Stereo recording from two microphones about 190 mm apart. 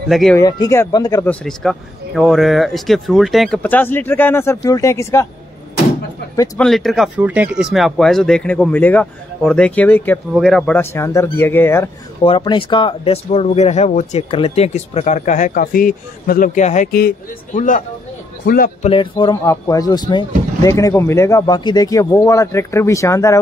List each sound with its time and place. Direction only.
0.1 s speech: centre (ahead or behind)
0.4 s speech: 20° left (ahead or behind)
6.3 s speech: 20° left (ahead or behind)
6.6 s speech: centre (ahead or behind)
10.8 s speech: 15° left (ahead or behind)
12.2 s speech: 25° left (ahead or behind); by 17.1 s 50° left (ahead or behind)
18.4 s a man's voice: 50° left (ahead or behind)
18.8 s a man's voice: 30° left (ahead or behind)